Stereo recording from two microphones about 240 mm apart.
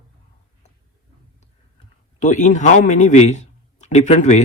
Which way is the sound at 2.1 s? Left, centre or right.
Left.